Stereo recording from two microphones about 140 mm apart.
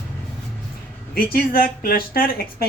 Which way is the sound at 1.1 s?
90° left.